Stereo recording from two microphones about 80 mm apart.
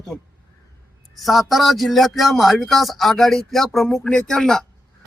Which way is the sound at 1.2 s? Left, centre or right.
Centre.